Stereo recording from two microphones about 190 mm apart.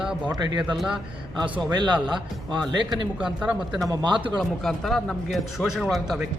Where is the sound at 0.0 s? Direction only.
5° right (ahead or behind).